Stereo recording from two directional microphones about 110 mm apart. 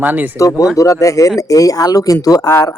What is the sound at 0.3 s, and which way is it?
A man's voice, 30° left (ahead or behind).